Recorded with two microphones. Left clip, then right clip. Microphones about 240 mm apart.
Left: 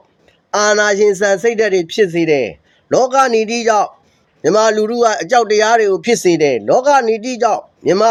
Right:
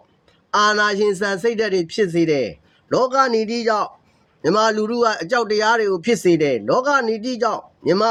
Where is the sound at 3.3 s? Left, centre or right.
Left.